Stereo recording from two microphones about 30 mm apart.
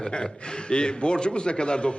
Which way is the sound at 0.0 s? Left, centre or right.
Left.